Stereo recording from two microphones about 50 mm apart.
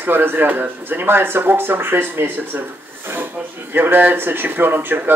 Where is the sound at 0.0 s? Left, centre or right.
Right.